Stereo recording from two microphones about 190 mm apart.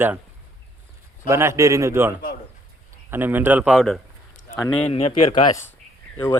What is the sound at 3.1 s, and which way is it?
Speech, 10° right (ahead or behind).